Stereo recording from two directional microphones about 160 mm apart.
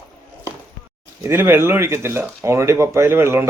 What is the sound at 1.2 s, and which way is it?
Speech, 15° right (ahead or behind).